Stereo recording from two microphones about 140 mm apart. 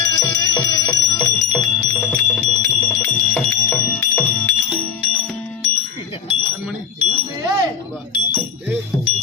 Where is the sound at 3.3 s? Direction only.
10° left (ahead or behind).